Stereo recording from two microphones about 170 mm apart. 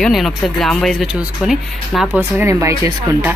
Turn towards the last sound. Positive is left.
turn(degrees=-15)  # may be behind; listen again after turning